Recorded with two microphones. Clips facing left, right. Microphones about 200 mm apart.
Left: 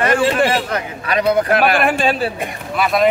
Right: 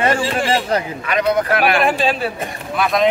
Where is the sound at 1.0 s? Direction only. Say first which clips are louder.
Left 5 dB; 35° left (ahead or behind).